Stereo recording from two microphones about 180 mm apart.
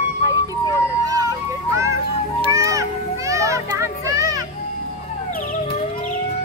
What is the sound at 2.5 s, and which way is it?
Children playing, 15° right (ahead or behind).